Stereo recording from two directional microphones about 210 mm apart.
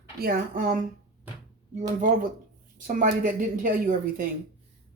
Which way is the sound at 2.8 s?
40° right (ahead or behind).